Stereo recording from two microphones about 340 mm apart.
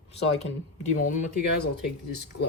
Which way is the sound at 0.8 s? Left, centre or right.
Left.